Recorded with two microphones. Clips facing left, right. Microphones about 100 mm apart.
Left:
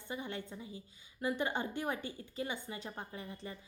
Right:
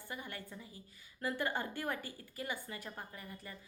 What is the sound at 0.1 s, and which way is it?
A woman's voice, 20° left (ahead or behind).